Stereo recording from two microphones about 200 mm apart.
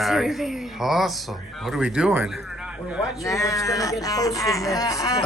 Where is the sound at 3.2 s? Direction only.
15° left (ahead or behind).